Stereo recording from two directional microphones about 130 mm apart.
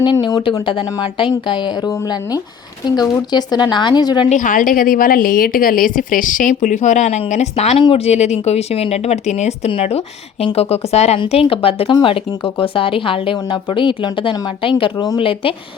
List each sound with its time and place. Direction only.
0.0 s speech: 35° left (ahead or behind)
4.3 s a woman's voice: 80° left; by 11.2 s 55° left (ahead or behind)
11.2 s speech: 45° left (ahead or behind)
15.2 s speech: 45° left (ahead or behind)